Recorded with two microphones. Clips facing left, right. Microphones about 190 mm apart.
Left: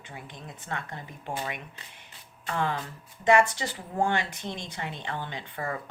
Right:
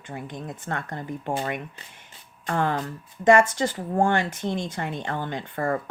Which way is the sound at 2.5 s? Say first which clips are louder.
Right 5 dB; 50° right (ahead or behind).